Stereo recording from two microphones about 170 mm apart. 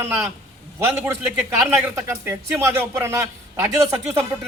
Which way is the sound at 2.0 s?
15° right (ahead or behind).